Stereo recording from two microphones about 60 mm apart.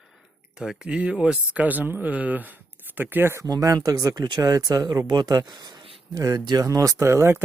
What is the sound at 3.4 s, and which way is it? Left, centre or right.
Speech, right.